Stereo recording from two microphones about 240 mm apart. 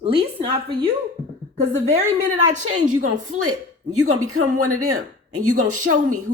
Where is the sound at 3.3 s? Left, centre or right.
Right.